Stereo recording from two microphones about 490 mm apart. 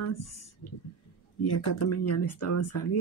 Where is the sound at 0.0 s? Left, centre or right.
Left.